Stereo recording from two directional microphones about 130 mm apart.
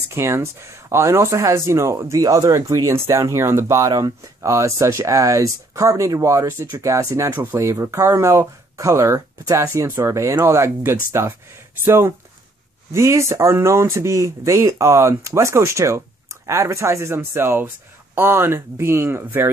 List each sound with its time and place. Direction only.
0.1 s speech: 20° right (ahead or behind)